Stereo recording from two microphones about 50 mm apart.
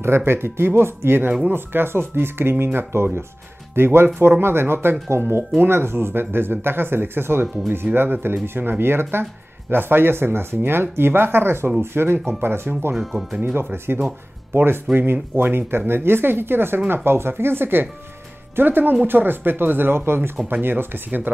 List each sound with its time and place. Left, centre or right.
0.0 s speech: right
12.9 s speech: centre
13.6 s speech: right